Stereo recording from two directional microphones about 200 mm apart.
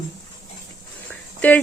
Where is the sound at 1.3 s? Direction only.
10° left (ahead or behind).